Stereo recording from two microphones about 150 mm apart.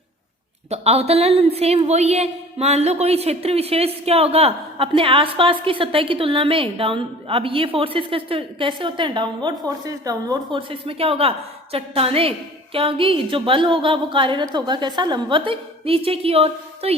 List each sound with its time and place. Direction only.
0.7 s a woman's voice: 45° right (ahead or behind)